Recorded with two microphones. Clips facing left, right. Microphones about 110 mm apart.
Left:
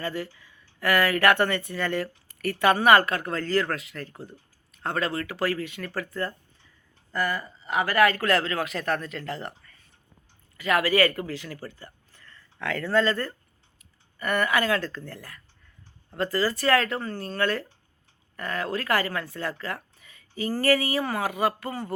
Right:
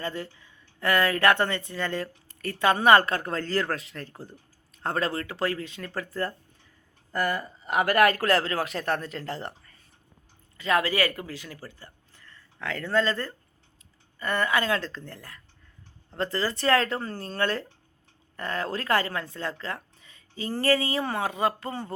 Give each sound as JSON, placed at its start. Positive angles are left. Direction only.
{"t": 0.0, "sound": "speech", "side_deg": -25}
{"t": 4.1, "sound": "speech", "side_deg": 0}
{"t": 4.8, "sound": "speech", "side_deg": -35}
{"t": 7.1, "sound": "speech", "side_deg": -45}
{"t": 10.6, "sound": "speech", "side_deg": -25}